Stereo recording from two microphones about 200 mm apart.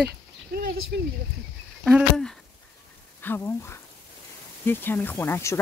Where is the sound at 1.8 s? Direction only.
Centre (ahead or behind).